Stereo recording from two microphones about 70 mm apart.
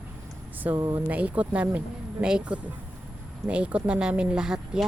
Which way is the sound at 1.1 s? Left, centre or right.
Right.